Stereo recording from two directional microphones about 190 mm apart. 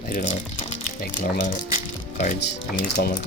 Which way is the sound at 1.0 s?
45° left (ahead or behind).